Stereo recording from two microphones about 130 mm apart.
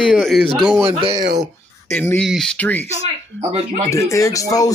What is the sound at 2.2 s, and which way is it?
Speech, 5° left (ahead or behind).